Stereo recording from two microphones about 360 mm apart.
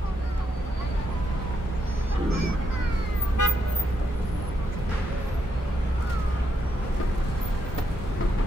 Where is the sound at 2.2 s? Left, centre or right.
Right.